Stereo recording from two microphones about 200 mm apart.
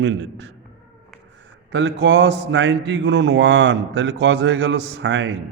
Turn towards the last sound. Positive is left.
turn(degrees=-65)  # may be behind; listen again after turning